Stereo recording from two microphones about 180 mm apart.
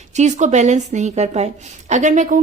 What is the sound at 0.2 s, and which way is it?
A woman's voice, 40° right (ahead or behind).